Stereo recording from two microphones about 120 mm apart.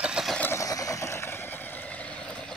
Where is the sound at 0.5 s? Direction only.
30° left (ahead or behind); by 2.3 s 10° left (ahead or behind).